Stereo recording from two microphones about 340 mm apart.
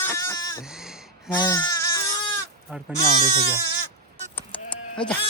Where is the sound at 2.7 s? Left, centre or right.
Centre.